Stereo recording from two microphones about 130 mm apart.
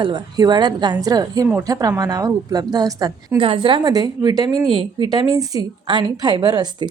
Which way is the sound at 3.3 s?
40° right (ahead or behind).